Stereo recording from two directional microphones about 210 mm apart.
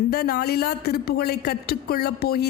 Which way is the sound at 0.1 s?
45° left (ahead or behind).